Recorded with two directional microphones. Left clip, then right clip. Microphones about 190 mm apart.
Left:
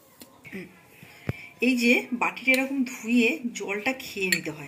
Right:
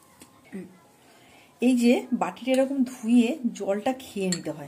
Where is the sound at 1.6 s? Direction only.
70° right (ahead or behind).